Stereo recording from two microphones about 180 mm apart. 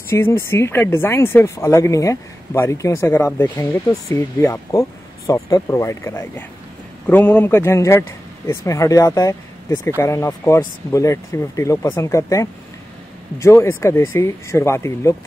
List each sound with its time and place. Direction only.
0.1 s speech: 15° left (ahead or behind)